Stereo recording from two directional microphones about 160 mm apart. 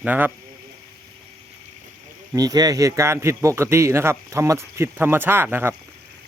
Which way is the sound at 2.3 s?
25° right (ahead or behind).